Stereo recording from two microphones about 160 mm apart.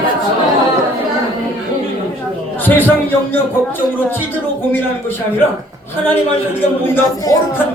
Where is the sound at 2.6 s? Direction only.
10° left (ahead or behind).